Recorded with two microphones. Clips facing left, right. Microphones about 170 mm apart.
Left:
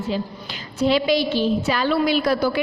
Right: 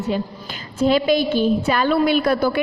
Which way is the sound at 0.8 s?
50° right (ahead or behind).